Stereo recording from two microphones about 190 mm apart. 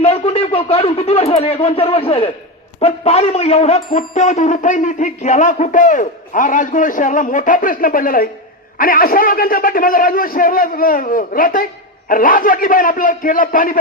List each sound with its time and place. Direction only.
0.0 s speech: 30° left (ahead or behind)